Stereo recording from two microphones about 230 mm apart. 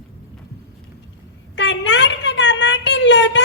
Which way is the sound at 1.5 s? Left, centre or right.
Left.